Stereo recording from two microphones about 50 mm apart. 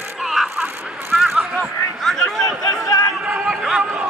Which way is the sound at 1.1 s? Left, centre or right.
Centre.